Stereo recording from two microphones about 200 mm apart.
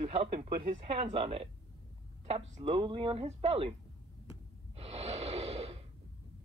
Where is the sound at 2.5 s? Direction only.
30° right (ahead or behind).